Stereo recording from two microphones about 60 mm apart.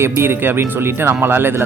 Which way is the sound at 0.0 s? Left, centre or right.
Right.